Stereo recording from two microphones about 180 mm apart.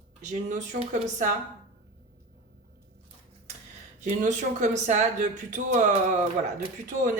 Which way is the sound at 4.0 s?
40° right (ahead or behind).